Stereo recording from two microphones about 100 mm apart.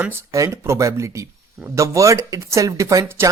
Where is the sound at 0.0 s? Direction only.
25° right (ahead or behind).